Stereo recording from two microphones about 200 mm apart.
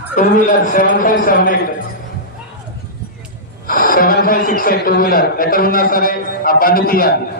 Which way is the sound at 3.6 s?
45° left (ahead or behind).